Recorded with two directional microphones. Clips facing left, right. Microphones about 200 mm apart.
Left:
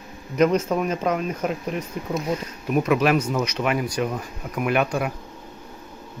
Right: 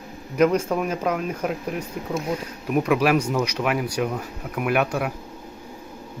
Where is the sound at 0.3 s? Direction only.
5° right (ahead or behind).